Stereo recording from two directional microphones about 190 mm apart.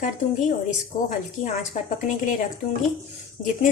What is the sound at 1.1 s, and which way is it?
Speech, 45° left (ahead or behind).